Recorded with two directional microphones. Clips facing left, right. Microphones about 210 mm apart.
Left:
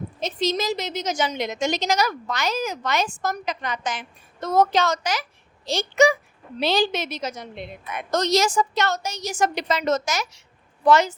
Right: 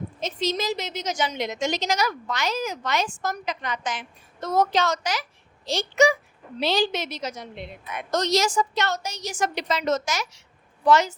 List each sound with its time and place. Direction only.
0.2 s a woman's voice: 35° left (ahead or behind); by 11.1 s 55° left (ahead or behind)